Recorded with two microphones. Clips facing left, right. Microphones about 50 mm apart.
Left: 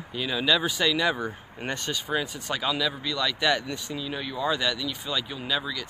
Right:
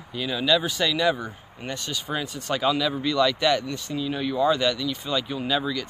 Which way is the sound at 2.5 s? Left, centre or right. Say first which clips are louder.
Right 5 dB; centre.